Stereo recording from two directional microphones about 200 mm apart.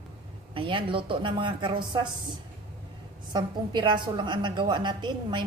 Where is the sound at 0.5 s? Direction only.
25° right (ahead or behind).